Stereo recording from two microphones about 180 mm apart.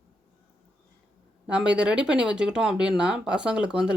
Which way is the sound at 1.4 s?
5° right (ahead or behind).